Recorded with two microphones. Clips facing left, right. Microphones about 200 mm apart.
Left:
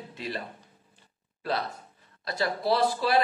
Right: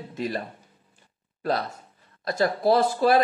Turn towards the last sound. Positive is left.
turn(degrees=-45)  # may be behind; listen again after turning